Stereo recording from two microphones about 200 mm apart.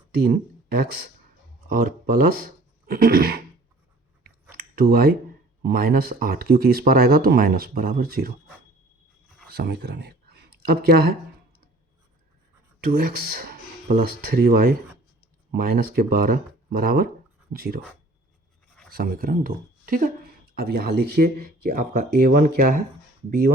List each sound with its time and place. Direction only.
0.1 s speech: 45° right (ahead or behind)
4.5 s a sound: 50° right (ahead or behind)
5.6 s speech: 50° right (ahead or behind)
9.5 s speech: 55° right (ahead or behind)
12.8 s speech: 45° right (ahead or behind)
18.9 s speech: 50° right (ahead or behind)